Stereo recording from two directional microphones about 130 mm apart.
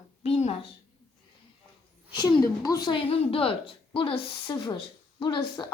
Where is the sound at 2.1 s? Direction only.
30° left (ahead or behind).